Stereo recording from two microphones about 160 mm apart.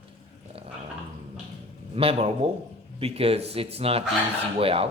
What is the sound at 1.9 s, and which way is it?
Speech, 35° right (ahead or behind).